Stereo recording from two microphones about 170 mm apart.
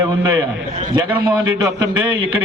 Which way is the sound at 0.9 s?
25° right (ahead or behind).